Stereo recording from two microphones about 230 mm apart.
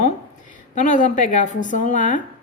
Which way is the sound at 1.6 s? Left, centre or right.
Left.